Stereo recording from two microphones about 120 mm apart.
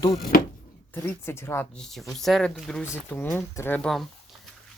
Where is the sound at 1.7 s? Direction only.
Centre (ahead or behind).